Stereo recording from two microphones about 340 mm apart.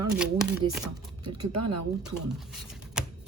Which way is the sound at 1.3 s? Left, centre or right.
Right.